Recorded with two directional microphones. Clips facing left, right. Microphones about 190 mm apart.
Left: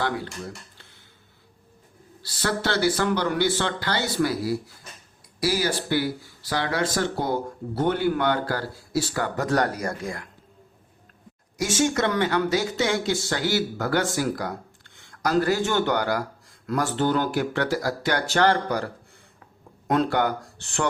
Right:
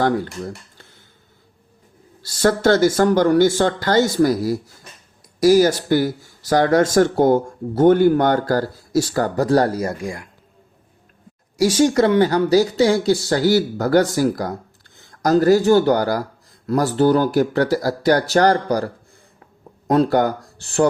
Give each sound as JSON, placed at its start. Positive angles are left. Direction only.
{"t": 2.2, "sound": "speech", "side_deg": -45}
{"t": 10.0, "sound": "speech", "side_deg": -15}
{"t": 11.5, "sound": "speech", "side_deg": -30}
{"t": 19.9, "sound": "speech", "side_deg": -40}